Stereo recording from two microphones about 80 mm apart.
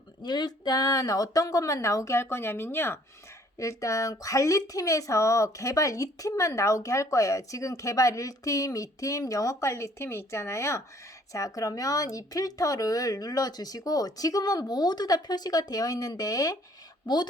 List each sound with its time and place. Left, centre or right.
0.2 s speech: left
3.6 s speech: left
17.1 s a woman's voice: left